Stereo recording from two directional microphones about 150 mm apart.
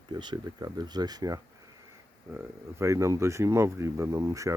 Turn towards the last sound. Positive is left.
turn(degrees=-25)  # may be behind; listen again after turning